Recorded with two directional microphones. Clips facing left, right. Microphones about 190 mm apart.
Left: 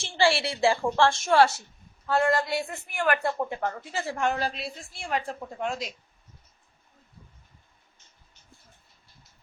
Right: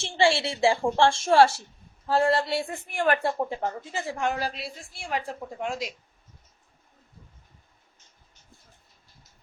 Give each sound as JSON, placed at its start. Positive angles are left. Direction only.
{"t": 0.0, "sound": "a woman's voice", "side_deg": -20}